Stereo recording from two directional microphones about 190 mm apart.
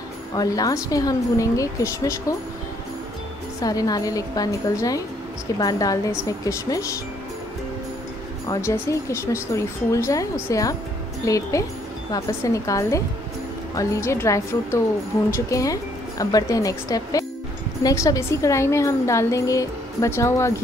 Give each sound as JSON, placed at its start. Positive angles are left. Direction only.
{"t": 0.4, "sound": "speech", "side_deg": 20}
{"t": 3.6, "sound": "a woman's voice", "side_deg": 20}
{"t": 8.5, "sound": "speech", "side_deg": 15}